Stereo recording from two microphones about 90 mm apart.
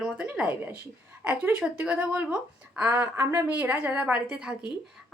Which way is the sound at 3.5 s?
15° right (ahead or behind).